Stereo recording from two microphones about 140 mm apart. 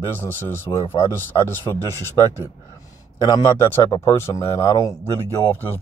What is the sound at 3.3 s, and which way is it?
Speech, 20° left (ahead or behind).